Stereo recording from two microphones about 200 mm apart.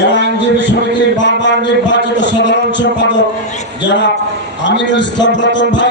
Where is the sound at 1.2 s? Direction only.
65° left (ahead or behind).